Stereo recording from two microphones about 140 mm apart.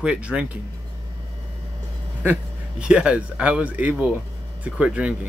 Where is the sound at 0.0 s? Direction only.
5° right (ahead or behind).